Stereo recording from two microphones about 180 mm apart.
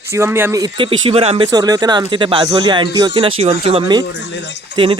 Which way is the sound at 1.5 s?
20° right (ahead or behind).